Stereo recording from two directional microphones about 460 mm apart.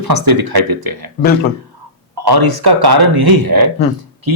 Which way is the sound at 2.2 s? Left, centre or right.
Right.